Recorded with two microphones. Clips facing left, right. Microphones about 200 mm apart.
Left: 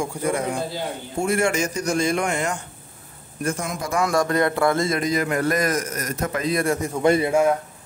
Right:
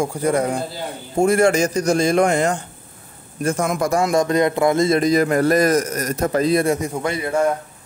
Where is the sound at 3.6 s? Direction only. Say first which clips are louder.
Right 8 dB; 50° right (ahead or behind).